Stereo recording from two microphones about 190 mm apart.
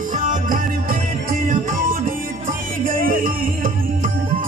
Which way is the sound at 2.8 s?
45° right (ahead or behind).